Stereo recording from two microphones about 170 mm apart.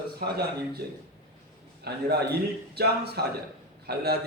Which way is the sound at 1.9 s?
70° right (ahead or behind).